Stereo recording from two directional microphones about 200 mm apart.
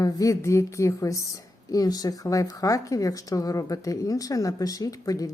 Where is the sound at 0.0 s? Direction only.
15° left (ahead or behind).